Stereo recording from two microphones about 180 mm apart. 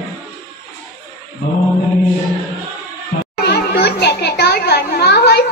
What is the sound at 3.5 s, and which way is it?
Children playing, 65° left (ahead or behind).